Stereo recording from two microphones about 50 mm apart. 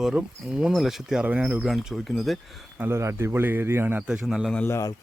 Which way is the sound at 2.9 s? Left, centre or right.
Right.